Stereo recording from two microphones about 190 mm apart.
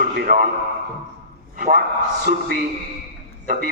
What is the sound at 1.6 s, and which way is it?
Speech, 50° right (ahead or behind).